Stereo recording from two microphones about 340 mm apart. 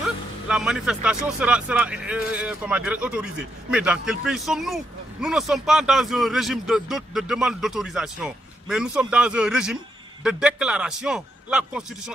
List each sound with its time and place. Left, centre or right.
0.0 s a man's voice: centre